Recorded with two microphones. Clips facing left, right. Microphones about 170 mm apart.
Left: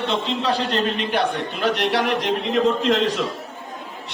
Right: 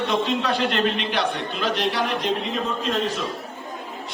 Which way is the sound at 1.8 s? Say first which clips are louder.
Left 3 dB; 80° left.